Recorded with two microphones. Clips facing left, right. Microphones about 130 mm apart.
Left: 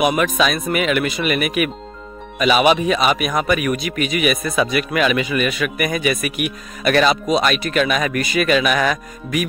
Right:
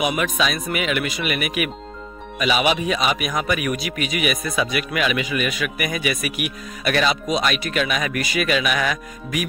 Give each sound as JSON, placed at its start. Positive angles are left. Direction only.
{"t": 0.0, "sound": "a man's voice", "side_deg": 50}